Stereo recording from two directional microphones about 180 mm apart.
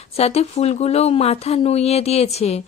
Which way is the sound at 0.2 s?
35° left (ahead or behind).